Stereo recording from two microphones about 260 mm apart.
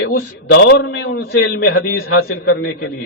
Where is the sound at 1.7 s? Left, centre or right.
Left.